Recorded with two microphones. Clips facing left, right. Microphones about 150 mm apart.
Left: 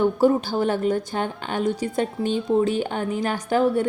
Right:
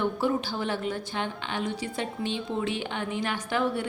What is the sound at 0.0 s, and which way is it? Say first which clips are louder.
A woman's voice: left 8 dB; 40° left (ahead or behind).